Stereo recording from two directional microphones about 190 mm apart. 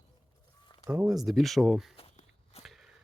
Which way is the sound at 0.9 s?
5° right (ahead or behind).